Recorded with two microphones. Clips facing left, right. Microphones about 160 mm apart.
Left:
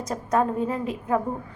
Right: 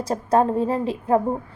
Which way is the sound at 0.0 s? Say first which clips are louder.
Right 4 dB; 30° right (ahead or behind).